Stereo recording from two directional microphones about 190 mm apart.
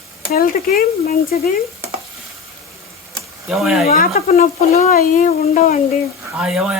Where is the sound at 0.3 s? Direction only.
50° left (ahead or behind).